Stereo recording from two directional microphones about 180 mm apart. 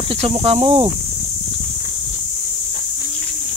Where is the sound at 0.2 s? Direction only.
35° right (ahead or behind).